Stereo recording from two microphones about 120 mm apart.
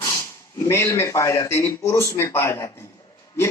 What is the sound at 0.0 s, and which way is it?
Speech, 25° left (ahead or behind).